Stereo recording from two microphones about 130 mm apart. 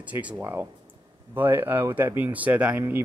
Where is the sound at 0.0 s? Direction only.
10° right (ahead or behind).